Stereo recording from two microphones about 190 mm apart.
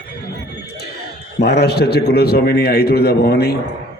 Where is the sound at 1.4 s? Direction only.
60° left (ahead or behind).